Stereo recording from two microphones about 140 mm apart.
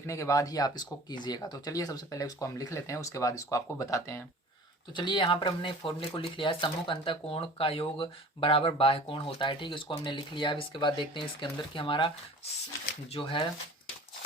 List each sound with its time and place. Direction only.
0.1 s speech: 20° left (ahead or behind)
4.9 s speech: 35° left (ahead or behind)
13.1 s speech: 40° left (ahead or behind)